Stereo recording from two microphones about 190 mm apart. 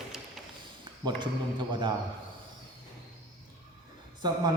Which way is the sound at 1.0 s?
25° right (ahead or behind).